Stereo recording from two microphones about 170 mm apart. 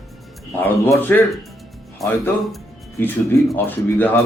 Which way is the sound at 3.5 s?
10° left (ahead or behind).